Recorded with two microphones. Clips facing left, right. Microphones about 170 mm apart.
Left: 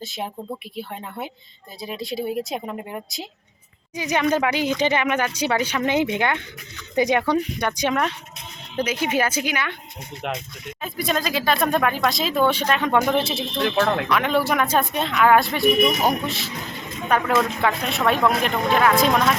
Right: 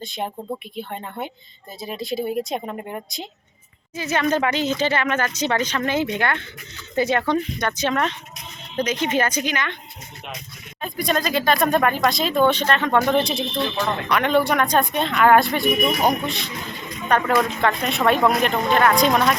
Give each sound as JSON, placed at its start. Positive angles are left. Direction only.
{"t": 0.0, "sound": "speech", "side_deg": 5}
{"t": 3.9, "sound": "speech", "side_deg": 15}
{"t": 10.2, "sound": "speech", "side_deg": 90}
{"t": 10.8, "sound": "speech", "side_deg": 5}